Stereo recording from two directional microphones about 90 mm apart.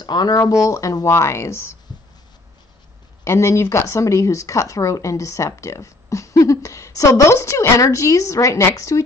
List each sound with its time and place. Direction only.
0.0 s speech: 50° left (ahead or behind); by 1.5 s 30° left (ahead or behind)
3.3 s speech: 35° left (ahead or behind)